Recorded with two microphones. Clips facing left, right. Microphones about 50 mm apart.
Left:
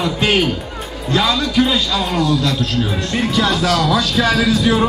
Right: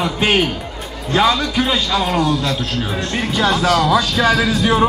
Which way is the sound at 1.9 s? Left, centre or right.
Centre.